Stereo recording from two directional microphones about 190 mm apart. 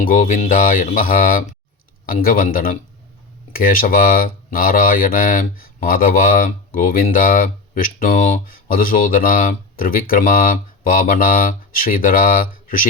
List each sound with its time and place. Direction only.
0.0 s speech: 45° left (ahead or behind)